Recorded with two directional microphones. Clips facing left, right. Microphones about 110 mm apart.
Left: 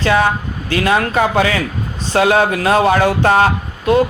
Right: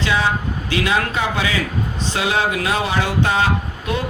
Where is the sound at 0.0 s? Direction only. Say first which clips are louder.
Left 5 dB; 50° left (ahead or behind).